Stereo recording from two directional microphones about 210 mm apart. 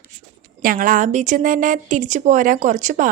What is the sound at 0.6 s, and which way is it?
A woman's voice, 40° right (ahead or behind).